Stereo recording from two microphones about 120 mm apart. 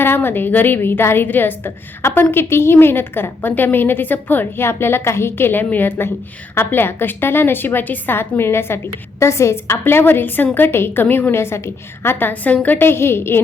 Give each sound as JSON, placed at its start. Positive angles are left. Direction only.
{"t": 0.0, "sound": "a woman's voice", "side_deg": 20}